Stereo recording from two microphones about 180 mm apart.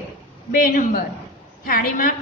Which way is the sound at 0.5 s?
50° left (ahead or behind).